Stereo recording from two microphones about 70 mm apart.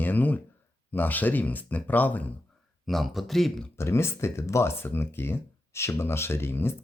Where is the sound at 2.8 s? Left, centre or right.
Centre.